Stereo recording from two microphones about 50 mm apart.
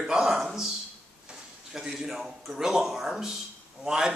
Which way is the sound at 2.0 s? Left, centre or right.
Centre.